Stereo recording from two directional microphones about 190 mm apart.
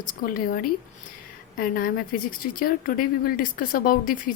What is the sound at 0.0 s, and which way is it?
Speech, 45° left (ahead or behind).